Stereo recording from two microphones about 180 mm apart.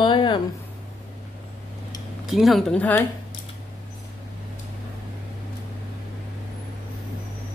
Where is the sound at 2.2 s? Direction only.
Centre (ahead or behind).